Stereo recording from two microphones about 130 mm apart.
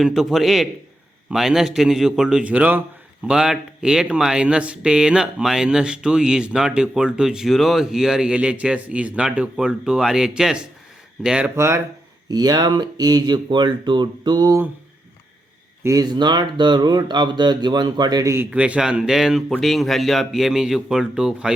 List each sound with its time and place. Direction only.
0.0 s speech: centre (ahead or behind)
11.5 s speech: 20° right (ahead or behind)
15.8 s speech: 25° right (ahead or behind)
18.5 s speech: 10° right (ahead or behind)